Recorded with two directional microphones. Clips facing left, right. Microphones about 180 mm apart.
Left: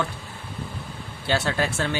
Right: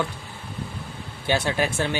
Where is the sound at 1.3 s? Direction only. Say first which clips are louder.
Right 1 dB; 15° right (ahead or behind).